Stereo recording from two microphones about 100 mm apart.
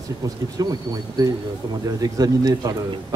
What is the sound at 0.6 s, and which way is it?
Speech, 40° right (ahead or behind).